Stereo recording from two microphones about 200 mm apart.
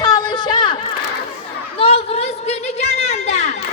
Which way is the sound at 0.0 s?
20° left (ahead or behind).